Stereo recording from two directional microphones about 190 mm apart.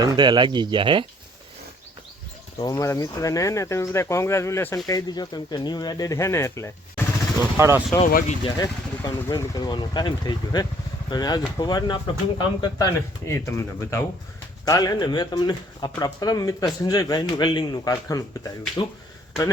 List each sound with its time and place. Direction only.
0.0 s speech: 25° right (ahead or behind)
2.6 s speech: 20° left (ahead or behind)
7.5 s speech: 15° right (ahead or behind)
8.0 s speech: 40° left (ahead or behind)
8.4 s speech: 20° left (ahead or behind)